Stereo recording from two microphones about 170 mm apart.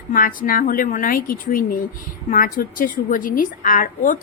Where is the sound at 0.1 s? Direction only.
55° left (ahead or behind).